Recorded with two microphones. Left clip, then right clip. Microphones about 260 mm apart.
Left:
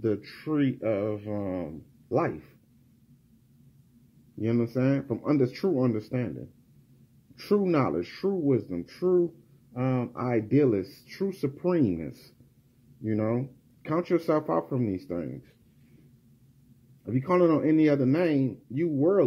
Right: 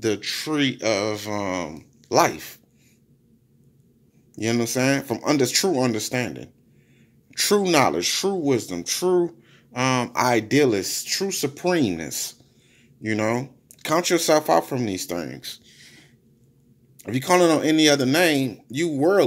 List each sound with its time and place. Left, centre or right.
0.0 s speech: centre
4.4 s speech: centre
7.6 s speech: centre
9.8 s speech: right
10.1 s speech: centre
17.0 s speech: centre